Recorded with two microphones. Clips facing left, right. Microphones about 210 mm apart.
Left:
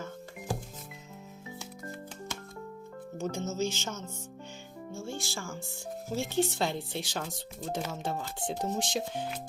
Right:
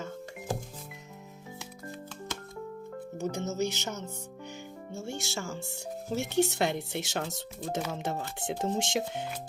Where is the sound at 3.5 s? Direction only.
60° right (ahead or behind).